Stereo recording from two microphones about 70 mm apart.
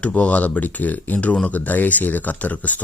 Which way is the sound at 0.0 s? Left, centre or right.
Centre.